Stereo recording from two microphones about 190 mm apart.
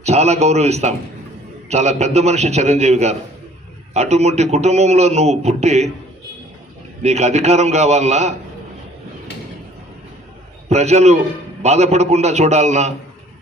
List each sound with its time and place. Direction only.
0.0 s a man's voice: 35° right (ahead or behind)
7.0 s a man's voice: 35° right (ahead or behind)
10.7 s a man's voice: 35° right (ahead or behind)